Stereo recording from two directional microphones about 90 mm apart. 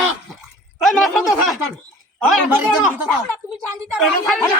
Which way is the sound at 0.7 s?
Centre (ahead or behind).